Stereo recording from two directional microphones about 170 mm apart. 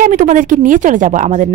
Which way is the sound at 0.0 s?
50° right (ahead or behind).